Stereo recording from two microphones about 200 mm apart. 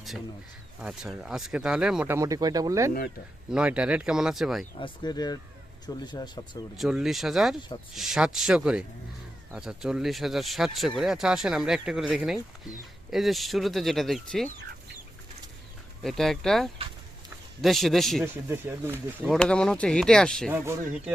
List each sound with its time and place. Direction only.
0.8 s speech: 5° right (ahead or behind)
3.5 s speech: 5° right (ahead or behind)
4.8 s speech: 20° left (ahead or behind)
6.7 s speech: centre (ahead or behind)
16.0 s speech: centre (ahead or behind)
18.2 s speech: 10° right (ahead or behind)
19.3 s speech: 5° left (ahead or behind)